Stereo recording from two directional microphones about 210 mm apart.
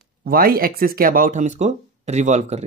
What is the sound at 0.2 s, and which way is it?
Speech, 45° right (ahead or behind).